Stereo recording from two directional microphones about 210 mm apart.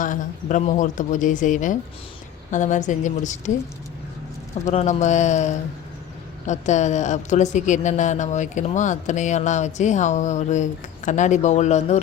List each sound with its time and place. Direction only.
0.0 s a woman's voice: 40° left (ahead or behind)
4.6 s a woman's voice: 30° left (ahead or behind)